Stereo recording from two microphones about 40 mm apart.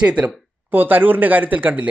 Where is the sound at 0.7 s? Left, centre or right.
Right.